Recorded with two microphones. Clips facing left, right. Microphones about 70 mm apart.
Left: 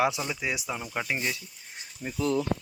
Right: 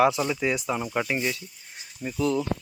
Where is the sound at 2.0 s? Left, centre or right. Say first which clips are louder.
Right 3 dB; left.